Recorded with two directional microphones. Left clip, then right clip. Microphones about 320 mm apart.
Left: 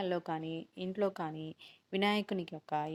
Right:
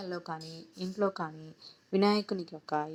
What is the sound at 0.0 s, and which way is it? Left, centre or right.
Speech, left.